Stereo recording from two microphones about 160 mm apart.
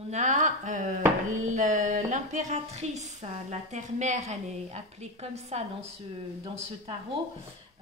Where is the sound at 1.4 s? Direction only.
50° right (ahead or behind).